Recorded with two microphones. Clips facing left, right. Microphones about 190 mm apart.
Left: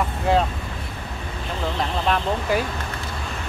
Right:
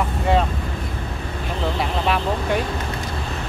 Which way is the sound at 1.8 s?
5° right (ahead or behind).